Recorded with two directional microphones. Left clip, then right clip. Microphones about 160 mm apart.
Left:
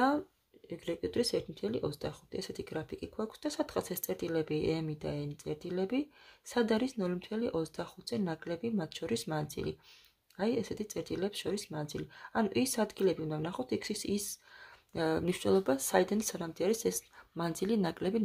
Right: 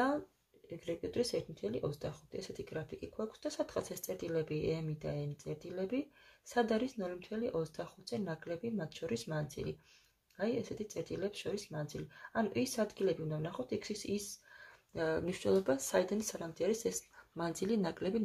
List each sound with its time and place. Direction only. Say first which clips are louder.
0.7 s speech: left 4 dB; 50° left (ahead or behind); by 18.2 s 35° left (ahead or behind)